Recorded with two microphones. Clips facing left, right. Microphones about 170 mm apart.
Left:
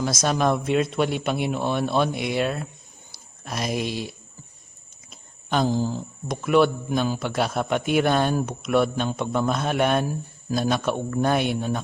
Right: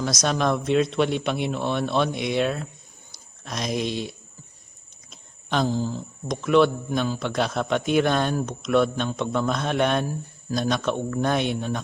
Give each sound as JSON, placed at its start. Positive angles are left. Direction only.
{"t": 0.0, "sound": "a man's voice", "side_deg": 5}
{"t": 5.1, "sound": "a sound", "side_deg": 5}
{"t": 5.6, "sound": "a man's voice", "side_deg": 15}
{"t": 6.2, "sound": "a man's voice", "side_deg": 5}